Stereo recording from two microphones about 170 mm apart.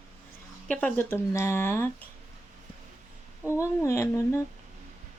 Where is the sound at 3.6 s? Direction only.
15° left (ahead or behind).